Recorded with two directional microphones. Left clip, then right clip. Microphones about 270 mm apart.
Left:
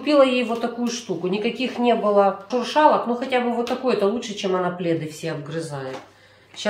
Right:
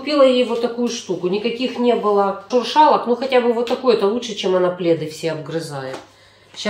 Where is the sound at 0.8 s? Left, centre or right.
Centre.